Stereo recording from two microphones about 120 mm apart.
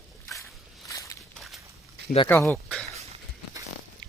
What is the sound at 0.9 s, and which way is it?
Walk, 25° left (ahead or behind).